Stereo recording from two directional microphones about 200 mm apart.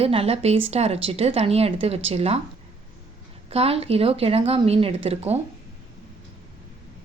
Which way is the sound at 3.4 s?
30° right (ahead or behind).